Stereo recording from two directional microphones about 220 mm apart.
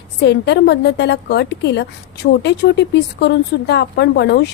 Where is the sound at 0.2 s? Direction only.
50° left (ahead or behind).